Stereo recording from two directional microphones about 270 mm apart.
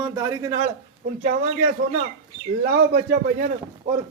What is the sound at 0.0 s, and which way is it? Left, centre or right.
Speech, centre.